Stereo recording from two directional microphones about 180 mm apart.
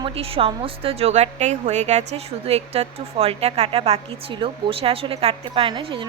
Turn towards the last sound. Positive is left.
turn(degrees=-25)  # may be behind; listen again after turning